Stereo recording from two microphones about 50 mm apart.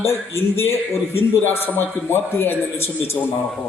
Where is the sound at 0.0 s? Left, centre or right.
Left.